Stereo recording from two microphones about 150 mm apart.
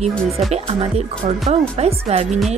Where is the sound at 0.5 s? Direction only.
45° right (ahead or behind).